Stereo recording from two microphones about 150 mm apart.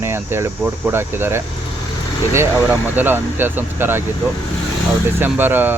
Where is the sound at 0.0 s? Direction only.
15° right (ahead or behind).